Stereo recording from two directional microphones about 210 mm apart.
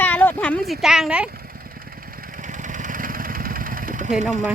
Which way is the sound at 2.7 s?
40° right (ahead or behind).